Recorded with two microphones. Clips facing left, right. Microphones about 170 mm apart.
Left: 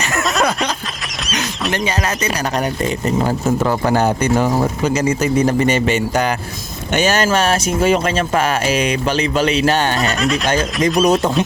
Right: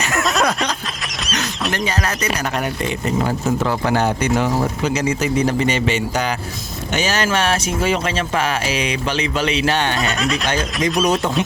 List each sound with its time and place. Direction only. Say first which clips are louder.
0.0 s a sound: left 1 dB; centre (ahead or behind)
1.7 s speech: left 3 dB; 20° left (ahead or behind)
2.6 s speech: left 3 dB; 40° left (ahead or behind)
10.0 s speech: left 3 dB; centre (ahead or behind)